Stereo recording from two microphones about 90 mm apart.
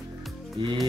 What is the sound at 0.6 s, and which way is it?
Speech, 65° right (ahead or behind).